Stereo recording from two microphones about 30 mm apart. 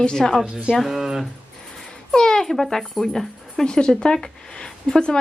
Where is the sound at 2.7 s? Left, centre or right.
Centre.